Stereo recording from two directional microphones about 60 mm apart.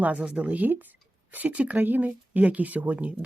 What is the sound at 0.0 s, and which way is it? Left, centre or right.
Speech, right.